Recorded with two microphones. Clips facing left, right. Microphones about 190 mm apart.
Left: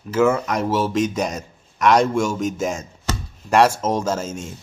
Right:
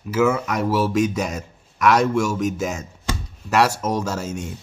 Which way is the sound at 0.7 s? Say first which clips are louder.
Right 2 dB; 25° left (ahead or behind).